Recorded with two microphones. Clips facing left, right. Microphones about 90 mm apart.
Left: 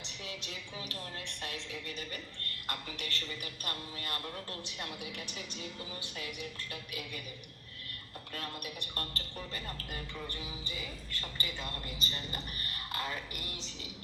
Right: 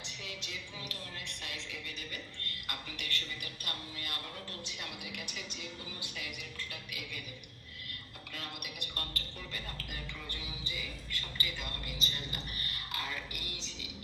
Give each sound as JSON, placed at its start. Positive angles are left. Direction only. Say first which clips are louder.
{"t": 0.2, "sound": "a woman's voice", "louder": "left 2 dB", "side_deg": 35}
{"t": 8.3, "sound": "a woman's voice", "louder": "left 3 dB", "side_deg": 40}